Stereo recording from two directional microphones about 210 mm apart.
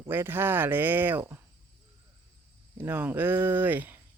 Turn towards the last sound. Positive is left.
turn(degrees=-10)  # may be behind; listen again after turning